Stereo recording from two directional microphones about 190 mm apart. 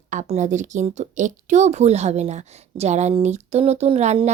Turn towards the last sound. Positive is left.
turn(degrees=-35)  # may be behind; listen again after turning